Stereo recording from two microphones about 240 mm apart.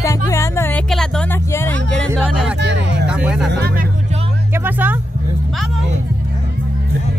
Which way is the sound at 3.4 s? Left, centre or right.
Right.